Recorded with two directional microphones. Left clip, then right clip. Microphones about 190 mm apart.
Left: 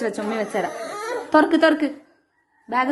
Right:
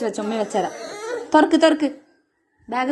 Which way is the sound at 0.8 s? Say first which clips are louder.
Left 1 dB; 20° left (ahead or behind).